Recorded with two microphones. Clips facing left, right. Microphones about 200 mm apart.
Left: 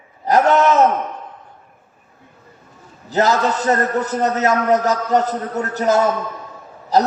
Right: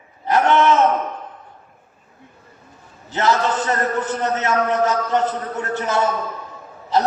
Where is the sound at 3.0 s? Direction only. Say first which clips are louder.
Left 2 dB; 40° left (ahead or behind).